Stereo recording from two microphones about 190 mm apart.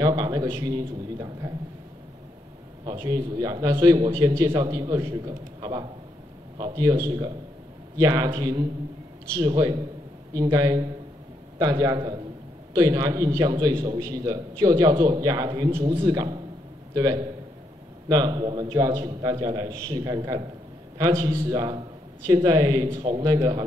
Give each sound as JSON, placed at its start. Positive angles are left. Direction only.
{"t": 0.0, "sound": "a man's voice", "side_deg": -20}
{"t": 2.8, "sound": "a man's voice", "side_deg": -20}